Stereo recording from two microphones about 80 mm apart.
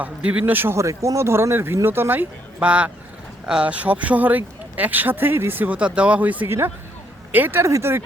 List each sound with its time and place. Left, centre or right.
0.0 s speech: centre
7.6 s speech: right